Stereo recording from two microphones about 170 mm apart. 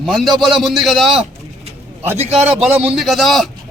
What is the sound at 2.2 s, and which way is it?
Speech, 40° right (ahead or behind).